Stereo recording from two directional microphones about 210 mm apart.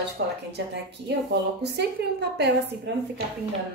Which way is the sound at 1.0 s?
55° right (ahead or behind).